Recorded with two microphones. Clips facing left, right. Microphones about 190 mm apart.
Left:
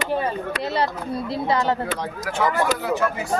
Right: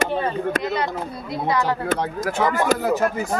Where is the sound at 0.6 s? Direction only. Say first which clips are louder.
Even; 30° left (ahead or behind).